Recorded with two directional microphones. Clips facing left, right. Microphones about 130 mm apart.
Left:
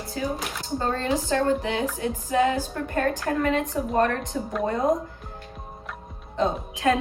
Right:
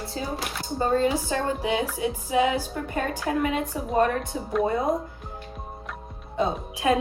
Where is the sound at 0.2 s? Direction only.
25° right (ahead or behind).